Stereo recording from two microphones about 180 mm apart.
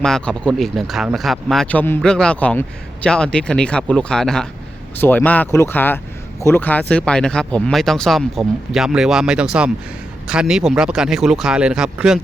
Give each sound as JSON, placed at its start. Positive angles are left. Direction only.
{"t": 0.0, "sound": "speech", "side_deg": 5}